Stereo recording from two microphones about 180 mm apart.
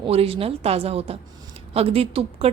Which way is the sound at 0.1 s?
35° right (ahead or behind).